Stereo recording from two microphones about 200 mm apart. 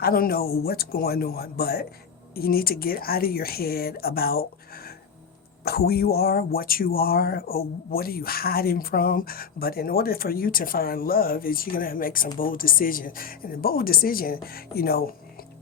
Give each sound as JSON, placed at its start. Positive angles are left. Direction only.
{"t": 0.0, "sound": "speech", "side_deg": 50}